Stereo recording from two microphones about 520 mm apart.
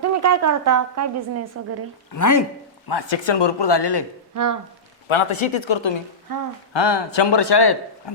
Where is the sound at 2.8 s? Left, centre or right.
Left.